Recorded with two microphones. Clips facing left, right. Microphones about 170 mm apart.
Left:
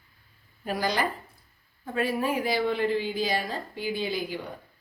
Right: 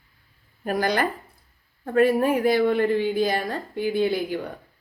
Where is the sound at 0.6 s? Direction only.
50° right (ahead or behind).